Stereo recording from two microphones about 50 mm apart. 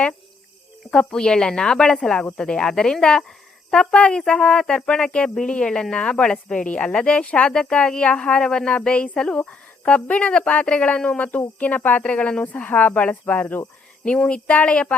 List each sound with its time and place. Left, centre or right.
0.9 s speech: centre; by 12.0 s left
12.0 s speech: left
14.0 s speech: left